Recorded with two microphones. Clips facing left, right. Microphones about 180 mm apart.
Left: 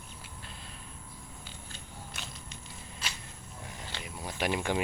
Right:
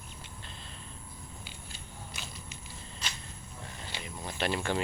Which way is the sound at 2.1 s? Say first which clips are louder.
Even; centre (ahead or behind).